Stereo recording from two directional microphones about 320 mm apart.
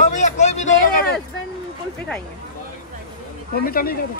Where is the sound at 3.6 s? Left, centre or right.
Left.